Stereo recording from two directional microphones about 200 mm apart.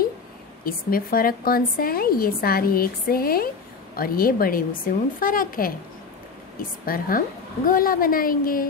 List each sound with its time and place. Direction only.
0.7 s speech: 45° left (ahead or behind)
6.9 s speech: 45° left (ahead or behind)